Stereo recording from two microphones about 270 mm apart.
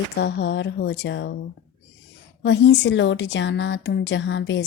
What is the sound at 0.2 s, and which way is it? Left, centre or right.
Speech, left.